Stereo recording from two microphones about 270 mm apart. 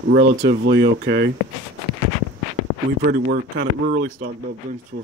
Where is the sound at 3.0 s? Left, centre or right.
Right.